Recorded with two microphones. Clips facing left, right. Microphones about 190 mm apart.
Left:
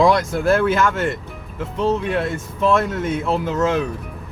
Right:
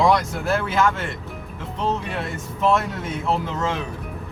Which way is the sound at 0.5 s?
50° left (ahead or behind).